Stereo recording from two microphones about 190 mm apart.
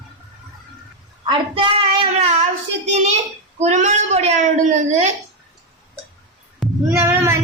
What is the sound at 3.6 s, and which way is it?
A woman's voice, 40° right (ahead or behind).